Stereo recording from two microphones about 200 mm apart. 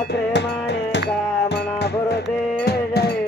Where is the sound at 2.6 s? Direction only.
55° left (ahead or behind).